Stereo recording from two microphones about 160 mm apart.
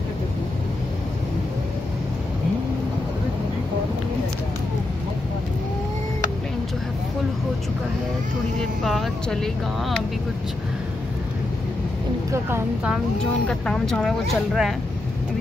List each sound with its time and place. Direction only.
8.5 s speech: centre (ahead or behind)
12.3 s speech: 15° right (ahead or behind)
13.5 s speech: 5° left (ahead or behind)